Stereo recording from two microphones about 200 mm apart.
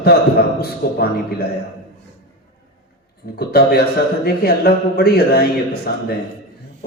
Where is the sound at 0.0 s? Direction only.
50° left (ahead or behind).